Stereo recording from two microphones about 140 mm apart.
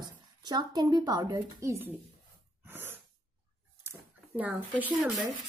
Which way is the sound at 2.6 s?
15° right (ahead or behind).